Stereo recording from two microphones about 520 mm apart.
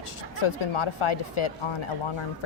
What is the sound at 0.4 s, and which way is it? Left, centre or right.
A woman's voice, left.